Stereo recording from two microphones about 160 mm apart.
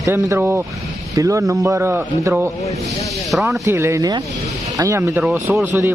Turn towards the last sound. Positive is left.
turn(degrees=-15)  # may be behind; listen again after turning